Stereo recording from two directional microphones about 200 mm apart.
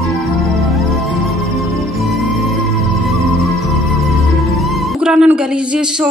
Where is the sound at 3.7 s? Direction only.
Centre (ahead or behind).